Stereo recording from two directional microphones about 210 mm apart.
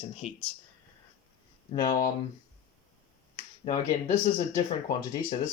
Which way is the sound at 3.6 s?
20° left (ahead or behind).